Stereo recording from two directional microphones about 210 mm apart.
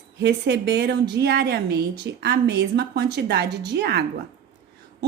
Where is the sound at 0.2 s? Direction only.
50° right (ahead or behind).